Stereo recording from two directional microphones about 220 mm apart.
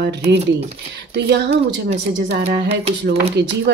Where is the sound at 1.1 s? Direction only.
55° right (ahead or behind).